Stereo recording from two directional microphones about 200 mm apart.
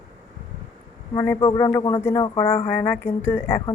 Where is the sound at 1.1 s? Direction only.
10° left (ahead or behind).